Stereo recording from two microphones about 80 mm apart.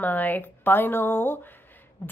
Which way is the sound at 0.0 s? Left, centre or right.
Left.